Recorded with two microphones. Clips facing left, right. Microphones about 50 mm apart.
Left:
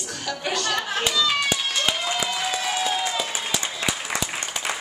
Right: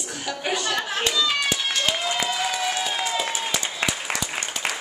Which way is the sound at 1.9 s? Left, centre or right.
Centre.